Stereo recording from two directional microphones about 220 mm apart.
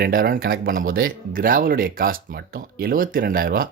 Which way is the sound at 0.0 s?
40° right (ahead or behind).